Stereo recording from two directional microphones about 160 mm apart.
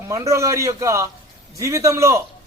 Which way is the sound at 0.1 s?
20° right (ahead or behind).